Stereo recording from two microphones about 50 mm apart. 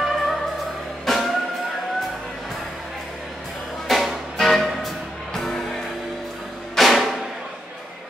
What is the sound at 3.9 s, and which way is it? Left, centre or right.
Music, centre.